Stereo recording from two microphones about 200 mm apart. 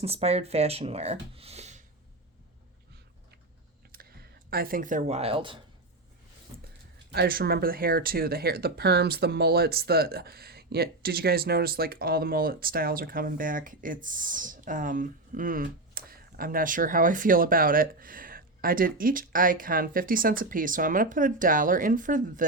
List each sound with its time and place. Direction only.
0.0 s speech: 30° right (ahead or behind)
3.9 s a sound: 45° right (ahead or behind)
4.4 s speech: 50° right (ahead or behind); by 5.5 s 25° right (ahead or behind)
7.1 s speech: 50° right (ahead or behind)